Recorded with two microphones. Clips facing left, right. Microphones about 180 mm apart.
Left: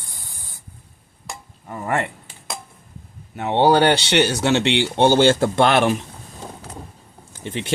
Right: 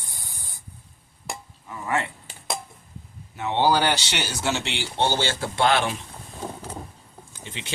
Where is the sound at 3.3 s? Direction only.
55° left (ahead or behind).